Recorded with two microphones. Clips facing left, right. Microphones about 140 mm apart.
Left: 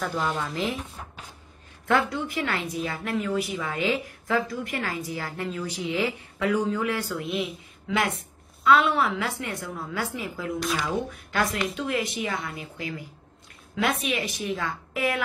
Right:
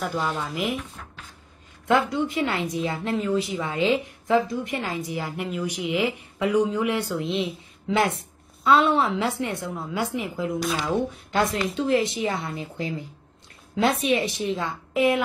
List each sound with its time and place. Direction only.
0.0 s speech: centre (ahead or behind)
1.9 s a woman's voice: 20° right (ahead or behind)